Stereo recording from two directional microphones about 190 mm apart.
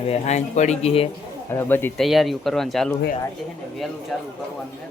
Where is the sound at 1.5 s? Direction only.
10° left (ahead or behind).